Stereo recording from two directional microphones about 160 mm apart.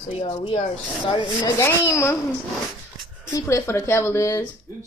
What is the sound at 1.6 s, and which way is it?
Speech, 20° left (ahead or behind).